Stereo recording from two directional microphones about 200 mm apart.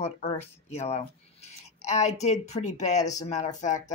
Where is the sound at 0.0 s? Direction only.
30° left (ahead or behind).